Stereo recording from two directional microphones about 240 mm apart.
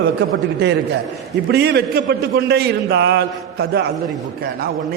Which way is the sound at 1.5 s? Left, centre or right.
Right.